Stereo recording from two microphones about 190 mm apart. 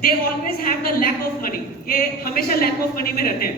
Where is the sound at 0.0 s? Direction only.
50° left (ahead or behind).